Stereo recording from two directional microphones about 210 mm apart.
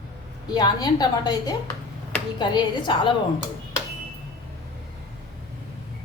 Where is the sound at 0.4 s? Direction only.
20° left (ahead or behind).